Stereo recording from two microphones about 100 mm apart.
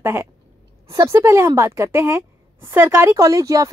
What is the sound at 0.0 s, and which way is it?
A woman's voice, 25° right (ahead or behind).